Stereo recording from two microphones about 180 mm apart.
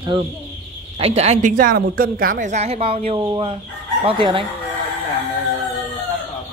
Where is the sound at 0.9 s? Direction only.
35° right (ahead or behind).